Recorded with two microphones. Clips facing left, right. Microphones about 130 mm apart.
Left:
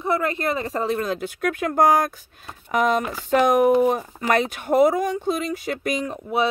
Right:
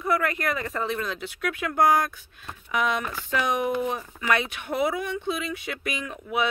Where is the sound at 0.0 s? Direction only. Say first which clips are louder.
Left 3 dB; 25° left (ahead or behind).